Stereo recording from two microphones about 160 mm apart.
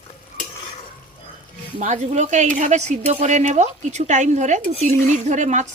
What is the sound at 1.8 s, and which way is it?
Speech, 50° right (ahead or behind).